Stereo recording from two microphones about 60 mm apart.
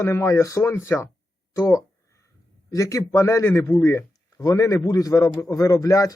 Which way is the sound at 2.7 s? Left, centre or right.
Left.